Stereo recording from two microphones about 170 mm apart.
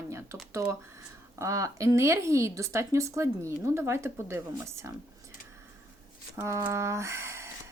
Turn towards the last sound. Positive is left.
turn(degrees=-15)  # may be behind; listen again after turning